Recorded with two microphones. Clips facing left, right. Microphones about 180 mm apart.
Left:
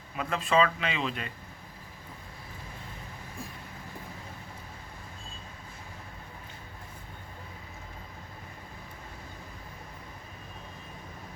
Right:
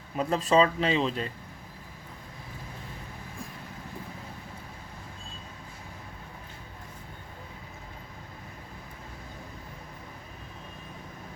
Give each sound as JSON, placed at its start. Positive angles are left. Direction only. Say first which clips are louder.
{"t": 0.2, "sound": "speech", "louder": "right 3 dB", "side_deg": -35}